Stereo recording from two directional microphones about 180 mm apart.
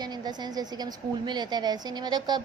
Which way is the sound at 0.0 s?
25° right (ahead or behind).